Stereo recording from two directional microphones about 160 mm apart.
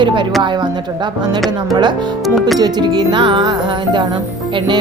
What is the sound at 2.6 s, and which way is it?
Music, 25° right (ahead or behind).